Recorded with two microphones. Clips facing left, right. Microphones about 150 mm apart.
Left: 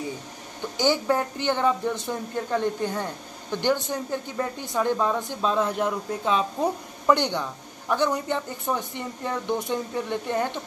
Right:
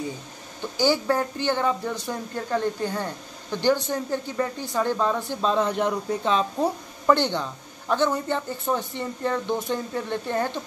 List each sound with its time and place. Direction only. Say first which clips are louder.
0.7 s speech: right 1 dB; 15° left (ahead or behind)